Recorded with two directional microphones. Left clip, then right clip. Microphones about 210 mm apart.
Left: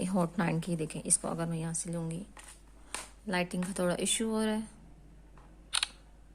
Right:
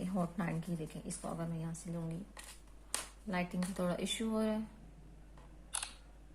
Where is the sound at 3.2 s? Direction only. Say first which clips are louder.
Left 7 dB; 45° left (ahead or behind).